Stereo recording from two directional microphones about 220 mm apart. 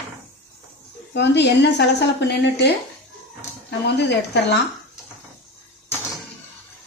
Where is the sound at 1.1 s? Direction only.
50° left (ahead or behind).